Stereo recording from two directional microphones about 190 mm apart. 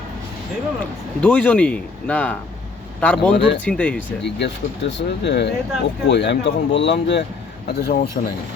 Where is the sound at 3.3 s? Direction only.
65° left (ahead or behind).